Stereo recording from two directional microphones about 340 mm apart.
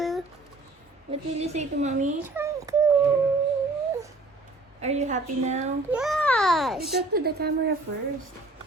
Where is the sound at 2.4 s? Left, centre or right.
Centre.